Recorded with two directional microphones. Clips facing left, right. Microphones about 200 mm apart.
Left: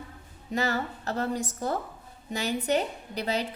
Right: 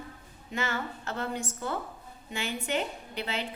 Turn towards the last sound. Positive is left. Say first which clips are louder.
# left 5 dB
turn(degrees=40)  # may be behind; listen again after turning